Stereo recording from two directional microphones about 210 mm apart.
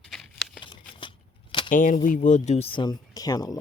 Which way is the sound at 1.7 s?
40° left (ahead or behind).